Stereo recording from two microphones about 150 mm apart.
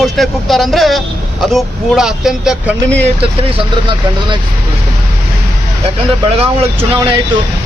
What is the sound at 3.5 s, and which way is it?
Speech, 30° right (ahead or behind).